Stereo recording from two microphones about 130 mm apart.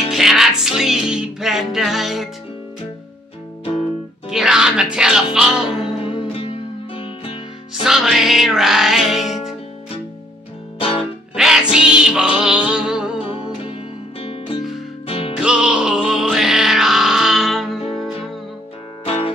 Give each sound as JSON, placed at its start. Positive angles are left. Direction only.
{"t": 0.1, "sound": "music", "side_deg": -5}
{"t": 4.3, "sound": "music", "side_deg": -5}
{"t": 6.0, "sound": "music", "side_deg": 45}
{"t": 7.8, "sound": "music", "side_deg": 0}
{"t": 10.8, "sound": "music", "side_deg": 45}
{"t": 11.3, "sound": "music", "side_deg": -5}
{"t": 13.3, "sound": "music", "side_deg": 45}
{"t": 15.4, "sound": "music", "side_deg": -5}
{"t": 19.0, "sound": "music", "side_deg": 45}